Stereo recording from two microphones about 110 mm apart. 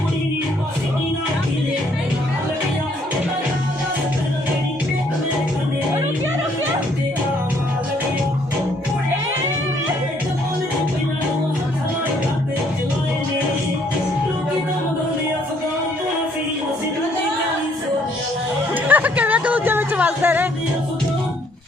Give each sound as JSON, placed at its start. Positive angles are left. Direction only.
{"t": 18.9, "sound": "music", "side_deg": -15}